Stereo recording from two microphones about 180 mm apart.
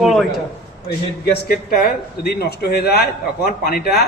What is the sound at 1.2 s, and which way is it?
A man's voice, 55° left (ahead or behind).